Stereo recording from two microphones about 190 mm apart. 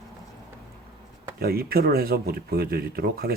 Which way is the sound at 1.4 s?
55° right (ahead or behind).